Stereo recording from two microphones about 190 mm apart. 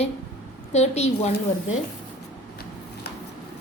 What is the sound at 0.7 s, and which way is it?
Speech, 35° left (ahead or behind).